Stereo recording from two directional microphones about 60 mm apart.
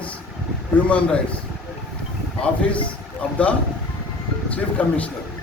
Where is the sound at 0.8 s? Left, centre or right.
Left.